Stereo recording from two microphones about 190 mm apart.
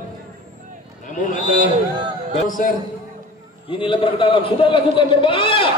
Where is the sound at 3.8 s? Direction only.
25° left (ahead or behind).